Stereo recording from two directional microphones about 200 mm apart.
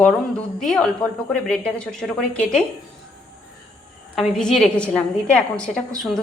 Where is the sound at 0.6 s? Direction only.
5° left (ahead or behind).